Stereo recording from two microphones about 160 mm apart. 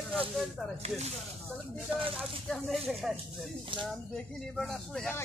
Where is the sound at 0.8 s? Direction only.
45° right (ahead or behind).